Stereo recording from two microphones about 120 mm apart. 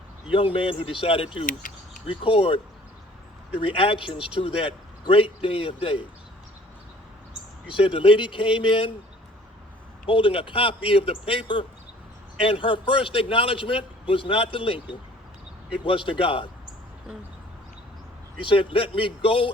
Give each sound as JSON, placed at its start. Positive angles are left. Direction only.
{"t": 0.3, "sound": "a man's voice", "side_deg": 45}
{"t": 3.7, "sound": "a man's voice", "side_deg": 50}
{"t": 7.7, "sound": "a man's voice", "side_deg": 45}
{"t": 10.1, "sound": "a man's voice", "side_deg": 45}
{"t": 18.3, "sound": "a man's voice", "side_deg": 45}